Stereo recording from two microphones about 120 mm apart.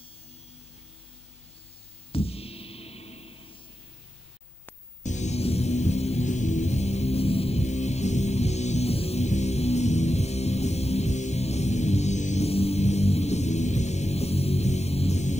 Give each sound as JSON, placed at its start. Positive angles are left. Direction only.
{"t": 2.1, "sound": "music", "side_deg": 55}
{"t": 5.0, "sound": "music", "side_deg": 75}